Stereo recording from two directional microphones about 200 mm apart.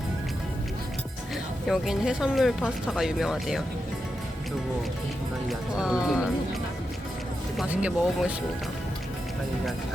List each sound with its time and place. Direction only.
1.6 s speech: centre (ahead or behind)
5.5 s speech: 5° right (ahead or behind)